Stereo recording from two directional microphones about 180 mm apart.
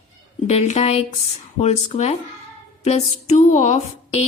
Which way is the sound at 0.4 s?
40° left (ahead or behind).